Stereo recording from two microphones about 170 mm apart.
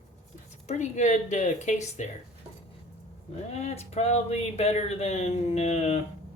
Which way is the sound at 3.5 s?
40° left (ahead or behind).